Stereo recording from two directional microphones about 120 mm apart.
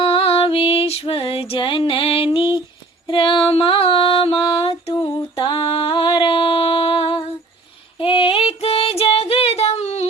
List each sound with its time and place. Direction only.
0.0 s music: 50° left (ahead or behind)
7.9 s child singing: 50° left (ahead or behind)